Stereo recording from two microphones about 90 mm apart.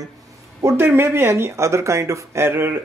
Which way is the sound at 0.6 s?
35° right (ahead or behind).